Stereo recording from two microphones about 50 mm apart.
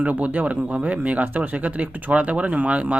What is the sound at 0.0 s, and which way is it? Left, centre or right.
Speech, right.